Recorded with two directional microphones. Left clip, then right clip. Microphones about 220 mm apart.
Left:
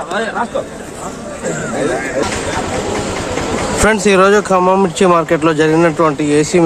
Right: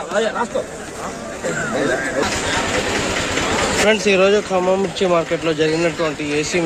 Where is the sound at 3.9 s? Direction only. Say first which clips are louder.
Left 5 dB; 30° left (ahead or behind).